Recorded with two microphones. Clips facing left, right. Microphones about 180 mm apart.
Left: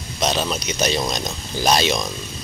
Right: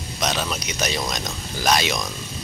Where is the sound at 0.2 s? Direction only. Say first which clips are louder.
Left 4 dB; 30° left (ahead or behind).